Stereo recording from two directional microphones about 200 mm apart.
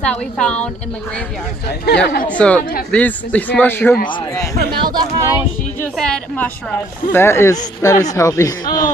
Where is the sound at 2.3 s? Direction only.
5° left (ahead or behind).